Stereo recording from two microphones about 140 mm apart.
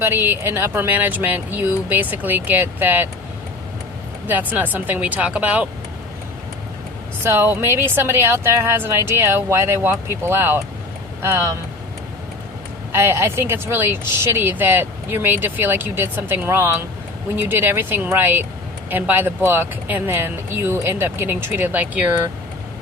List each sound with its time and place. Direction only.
0.0 s speech: 15° right (ahead or behind)
4.3 s speech: 15° right (ahead or behind)
7.3 s speech: 15° right (ahead or behind)
12.9 s speech: 15° right (ahead or behind)